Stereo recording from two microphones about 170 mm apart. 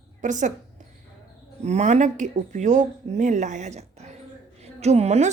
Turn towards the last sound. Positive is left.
turn(degrees=-40)  # may be behind; listen again after turning